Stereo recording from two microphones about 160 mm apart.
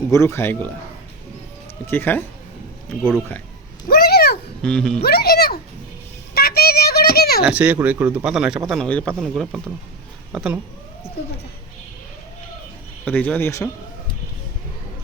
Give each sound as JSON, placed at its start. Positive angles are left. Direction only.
{"t": 0.1, "sound": "speech", "side_deg": 15}
{"t": 1.9, "sound": "speech", "side_deg": 10}
{"t": 3.8, "sound": "a sound", "side_deg": 70}
{"t": 4.6, "sound": "speech", "side_deg": 5}
{"t": 5.0, "sound": "a sound", "side_deg": 75}
{"t": 7.4, "sound": "speech", "side_deg": -10}
{"t": 13.1, "sound": "speech", "side_deg": 10}